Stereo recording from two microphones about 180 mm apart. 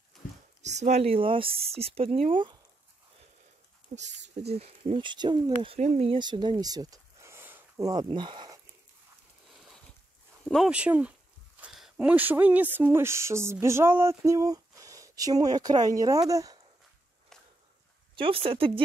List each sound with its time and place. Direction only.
0.6 s speech: 40° right (ahead or behind)
3.9 s speech: 40° right (ahead or behind); by 7.9 s 10° right (ahead or behind)
7.9 s speech: 25° right (ahead or behind)
10.5 s speech: 5° right (ahead or behind)
18.1 s speech: 30° right (ahead or behind)